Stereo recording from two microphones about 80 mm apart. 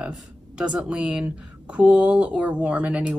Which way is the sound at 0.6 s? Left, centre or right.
Centre.